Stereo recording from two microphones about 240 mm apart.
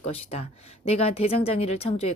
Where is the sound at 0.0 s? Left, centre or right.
Left.